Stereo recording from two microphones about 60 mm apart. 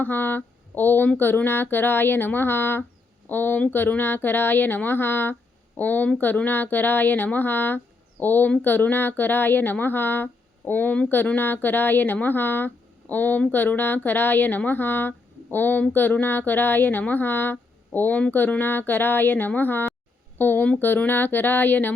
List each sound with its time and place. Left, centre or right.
0.0 s speech: left